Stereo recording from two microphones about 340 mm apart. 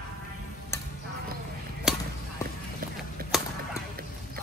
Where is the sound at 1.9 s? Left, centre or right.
Centre.